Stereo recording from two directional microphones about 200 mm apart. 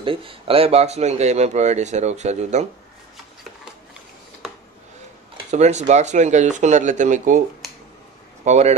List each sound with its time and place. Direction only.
0.0 s speech: 25° right (ahead or behind)
5.5 s speech: 35° right (ahead or behind)
8.5 s speech: 35° right (ahead or behind)